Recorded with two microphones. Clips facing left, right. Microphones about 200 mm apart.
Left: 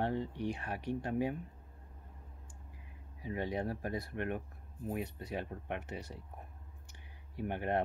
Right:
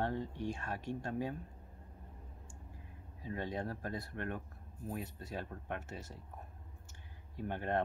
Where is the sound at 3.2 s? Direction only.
15° left (ahead or behind).